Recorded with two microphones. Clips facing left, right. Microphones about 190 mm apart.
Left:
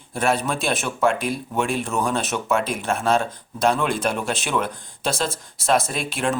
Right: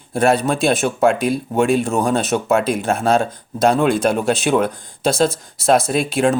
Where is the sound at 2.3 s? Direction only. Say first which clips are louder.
Right 7 dB; 40° right (ahead or behind).